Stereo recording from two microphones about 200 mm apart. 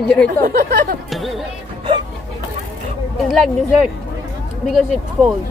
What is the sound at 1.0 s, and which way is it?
Speech, centre (ahead or behind).